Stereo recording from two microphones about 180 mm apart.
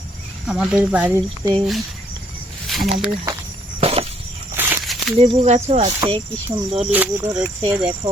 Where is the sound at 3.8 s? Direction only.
35° right (ahead or behind).